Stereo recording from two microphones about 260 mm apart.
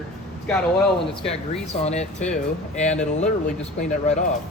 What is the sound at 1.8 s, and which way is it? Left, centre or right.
A man's voice, left.